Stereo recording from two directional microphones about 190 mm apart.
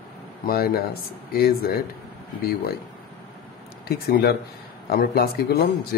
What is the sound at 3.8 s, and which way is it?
A man's voice, 55° left (ahead or behind).